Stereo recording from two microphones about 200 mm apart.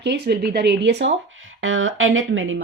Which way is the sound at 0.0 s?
55° right (ahead or behind).